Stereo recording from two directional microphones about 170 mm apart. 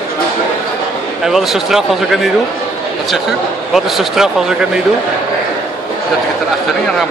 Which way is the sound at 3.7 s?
Centre (ahead or behind).